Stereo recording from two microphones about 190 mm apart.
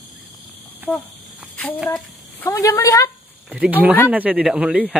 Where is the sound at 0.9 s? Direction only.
10° left (ahead or behind).